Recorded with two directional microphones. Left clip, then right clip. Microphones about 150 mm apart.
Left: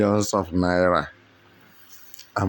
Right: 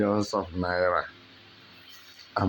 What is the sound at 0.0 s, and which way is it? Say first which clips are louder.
Speech: left 5 dB; 55° left (ahead or behind).